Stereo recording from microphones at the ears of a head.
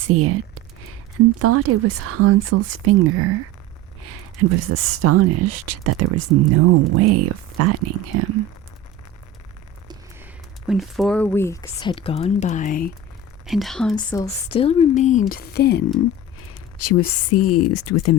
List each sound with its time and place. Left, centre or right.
0.0 s speech: right
10.9 s speech: centre
11.7 s speech: left
13.5 s speech: centre
14.5 s speech: left